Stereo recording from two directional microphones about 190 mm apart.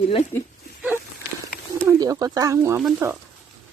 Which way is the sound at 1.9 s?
20° right (ahead or behind).